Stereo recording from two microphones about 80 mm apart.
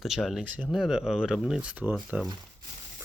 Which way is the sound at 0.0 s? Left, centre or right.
Centre.